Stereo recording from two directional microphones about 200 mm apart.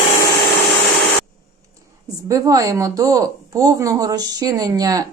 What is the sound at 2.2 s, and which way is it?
Speech, 15° right (ahead or behind).